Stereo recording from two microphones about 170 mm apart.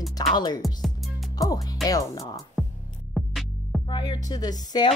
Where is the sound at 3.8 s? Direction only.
25° left (ahead or behind).